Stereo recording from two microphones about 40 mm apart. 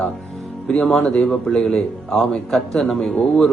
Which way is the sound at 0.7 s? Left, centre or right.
Centre.